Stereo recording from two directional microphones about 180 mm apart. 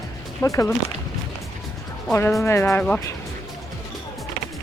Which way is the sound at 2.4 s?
15° left (ahead or behind).